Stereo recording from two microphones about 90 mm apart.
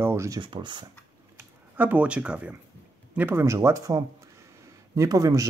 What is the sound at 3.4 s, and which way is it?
Speech, 35° right (ahead or behind).